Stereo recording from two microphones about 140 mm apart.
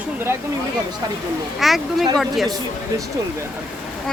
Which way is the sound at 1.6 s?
Centre (ahead or behind).